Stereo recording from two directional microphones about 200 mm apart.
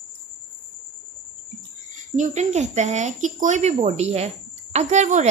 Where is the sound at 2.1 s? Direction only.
35° right (ahead or behind).